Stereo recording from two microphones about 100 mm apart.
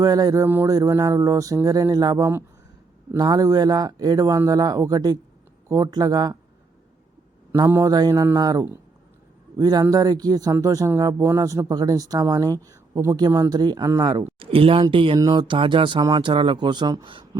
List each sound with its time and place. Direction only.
0.0 s speech: 40° right (ahead or behind)
0.4 s speech: 25° right (ahead or behind)
0.7 s speech: 35° right (ahead or behind)
7.5 s speech: 20° right (ahead or behind)
7.9 s speech: 40° right (ahead or behind)
14.1 s speech: 55° right (ahead or behind)